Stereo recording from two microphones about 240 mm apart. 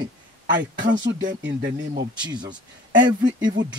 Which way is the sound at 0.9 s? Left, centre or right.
Right.